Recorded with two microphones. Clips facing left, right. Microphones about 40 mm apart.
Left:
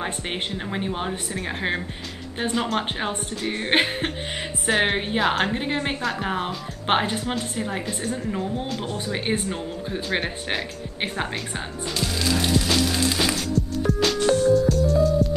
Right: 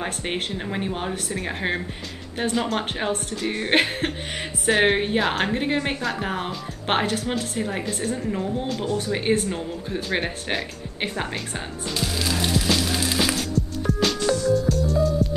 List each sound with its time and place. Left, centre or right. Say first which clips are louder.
0.0 s speech: right 1 dB; centre
8.8 s speech: right 4 dB; left
9.1 s speech: right 2 dB; centre
12.0 s music: left 1 dB; centre
14.2 s music: left 5 dB; left
14.5 s music: left 2 dB; centre